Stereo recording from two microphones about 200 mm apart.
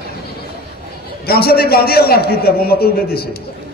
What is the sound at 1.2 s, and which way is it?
A man's voice, 50° left (ahead or behind).